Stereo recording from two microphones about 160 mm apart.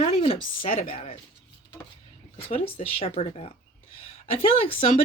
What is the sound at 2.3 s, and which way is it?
Speech, 40° left (ahead or behind).